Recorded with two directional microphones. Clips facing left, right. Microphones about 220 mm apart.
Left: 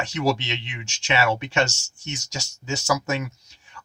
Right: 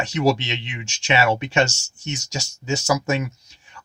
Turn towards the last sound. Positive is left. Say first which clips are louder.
# right 3 dB
turn(degrees=-15)  # may be behind; listen again after turning